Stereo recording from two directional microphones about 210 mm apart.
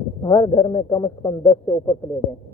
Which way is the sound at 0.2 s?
20° left (ahead or behind).